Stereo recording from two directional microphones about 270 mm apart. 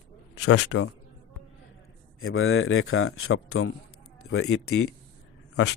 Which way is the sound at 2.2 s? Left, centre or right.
Left.